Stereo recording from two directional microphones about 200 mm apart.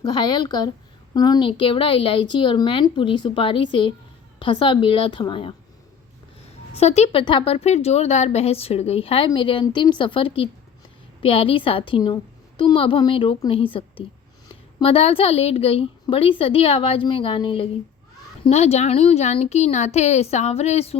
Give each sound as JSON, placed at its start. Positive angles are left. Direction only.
{"t": 0.1, "sound": "speech", "side_deg": 20}
{"t": 6.7, "sound": "a woman's voice", "side_deg": 35}